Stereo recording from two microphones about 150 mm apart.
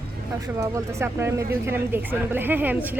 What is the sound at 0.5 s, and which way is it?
A woman's voice, 20° right (ahead or behind).